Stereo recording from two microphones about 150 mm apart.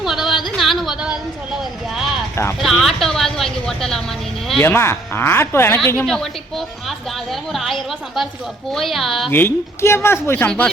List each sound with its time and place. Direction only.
0.0 s a sound: centre (ahead or behind)
2.3 s speech: 20° left (ahead or behind)
2.6 s a woman's voice: centre (ahead or behind)
4.6 s a woman's voice: 15° left (ahead or behind)
6.8 s a woman's voice: centre (ahead or behind)
9.3 s a woman's voice: 15° left (ahead or behind)